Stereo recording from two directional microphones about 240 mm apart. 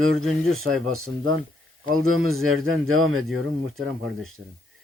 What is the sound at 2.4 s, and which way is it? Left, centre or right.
Speech, right.